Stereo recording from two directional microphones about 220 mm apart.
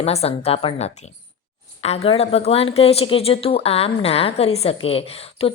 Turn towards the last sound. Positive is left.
turn(degrees=25)  # may be behind; listen again after turning